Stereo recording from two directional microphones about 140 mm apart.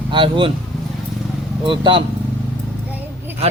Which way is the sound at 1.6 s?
35° right (ahead or behind).